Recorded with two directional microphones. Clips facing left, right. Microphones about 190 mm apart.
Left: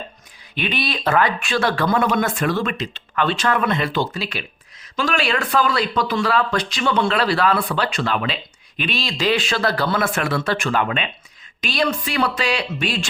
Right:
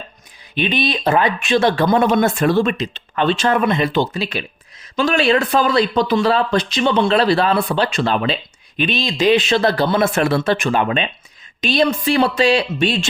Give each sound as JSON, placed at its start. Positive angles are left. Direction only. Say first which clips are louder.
{"t": 0.5, "sound": "speech", "louder": "right 5 dB", "side_deg": -20}